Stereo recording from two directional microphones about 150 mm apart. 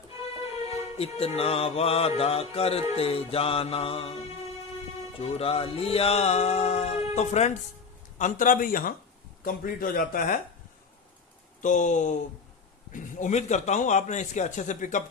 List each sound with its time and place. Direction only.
0.7 s music: 40° left (ahead or behind)
5.1 s music: 40° left (ahead or behind)
8.2 s speech: 65° left (ahead or behind)
11.6 s speech: 55° left (ahead or behind)
12.9 s music: 55° left (ahead or behind)